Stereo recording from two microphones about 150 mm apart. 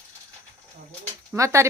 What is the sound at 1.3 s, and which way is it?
Speech, 20° right (ahead or behind).